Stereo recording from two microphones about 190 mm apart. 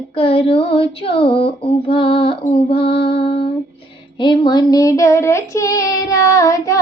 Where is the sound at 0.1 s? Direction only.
30° left (ahead or behind).